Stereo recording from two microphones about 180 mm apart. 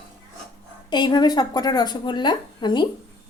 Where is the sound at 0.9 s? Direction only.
25° left (ahead or behind).